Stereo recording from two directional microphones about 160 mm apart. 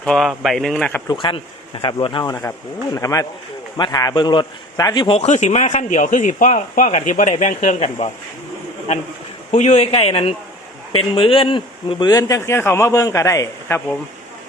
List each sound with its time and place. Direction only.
0.0 s speech: 5° left (ahead or behind)
1.0 s a man's voice: 30° left (ahead or behind)
9.5 s speech: 45° left (ahead or behind); by 13.8 s 15° left (ahead or behind)